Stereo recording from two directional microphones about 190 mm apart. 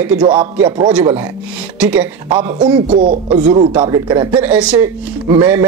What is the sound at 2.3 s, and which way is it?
Speech, 25° right (ahead or behind).